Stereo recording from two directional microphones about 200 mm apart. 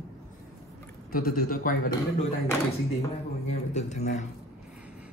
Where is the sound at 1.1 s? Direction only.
45° left (ahead or behind).